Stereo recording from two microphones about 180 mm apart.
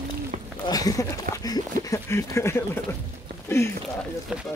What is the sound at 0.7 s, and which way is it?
Speech, 20° left (ahead or behind).